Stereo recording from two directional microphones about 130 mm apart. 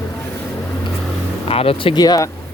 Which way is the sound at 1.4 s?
45° left (ahead or behind).